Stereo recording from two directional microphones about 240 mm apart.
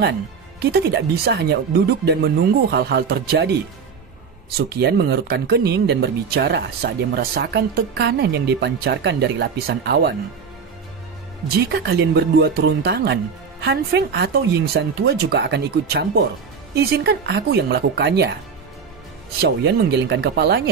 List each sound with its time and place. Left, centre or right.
0.6 s speech: right
4.6 s speech: right
11.5 s speech: right
19.4 s speech: right